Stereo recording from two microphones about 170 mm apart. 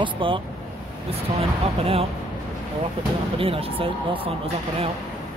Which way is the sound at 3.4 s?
35° right (ahead or behind).